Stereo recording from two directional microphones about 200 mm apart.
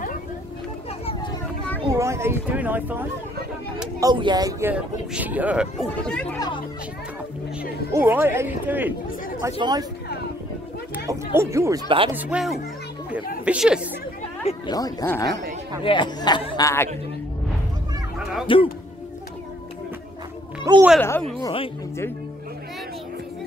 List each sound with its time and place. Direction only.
1.9 s speech: 15° right (ahead or behind)
4.0 s speech: 20° right (ahead or behind); by 6.3 s 5° left (ahead or behind)
7.9 s speech: 10° right (ahead or behind)
9.6 s speech: 20° right (ahead or behind)
11.1 s speech: 15° right (ahead or behind)
14.7 s speech: 20° left (ahead or behind)
18.5 s speech: 25° left (ahead or behind)
20.7 s speech: 15° right (ahead or behind)
21.0 s speech: 5° left (ahead or behind)
21.4 s speech: 25° left (ahead or behind)